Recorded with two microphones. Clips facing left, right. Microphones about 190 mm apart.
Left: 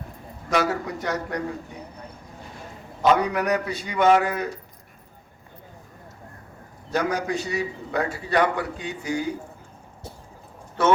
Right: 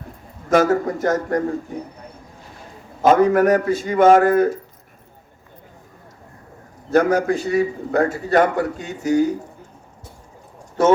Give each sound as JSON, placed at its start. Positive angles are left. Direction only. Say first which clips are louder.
{"t": 0.5, "sound": "a man's voice", "louder": "right 8 dB", "side_deg": -45}
{"t": 3.0, "sound": "a man's voice", "louder": "right 7 dB", "side_deg": -45}
{"t": 6.9, "sound": "a man's voice", "louder": "right 8 dB", "side_deg": -50}
{"t": 10.8, "sound": "speech", "louder": "right 5 dB", "side_deg": -45}